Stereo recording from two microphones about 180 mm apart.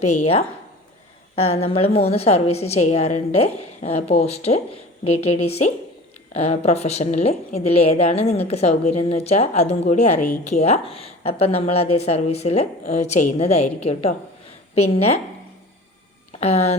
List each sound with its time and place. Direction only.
0.0 s speech: 40° left (ahead or behind)
1.5 s speech: 35° left (ahead or behind)
16.4 s speech: 35° left (ahead or behind)